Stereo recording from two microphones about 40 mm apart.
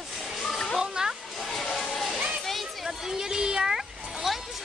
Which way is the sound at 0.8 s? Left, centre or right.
Centre.